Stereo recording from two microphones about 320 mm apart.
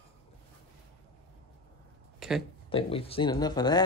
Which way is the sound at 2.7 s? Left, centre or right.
Centre.